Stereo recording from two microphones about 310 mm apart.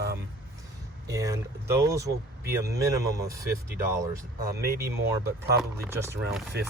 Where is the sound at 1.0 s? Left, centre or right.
Centre.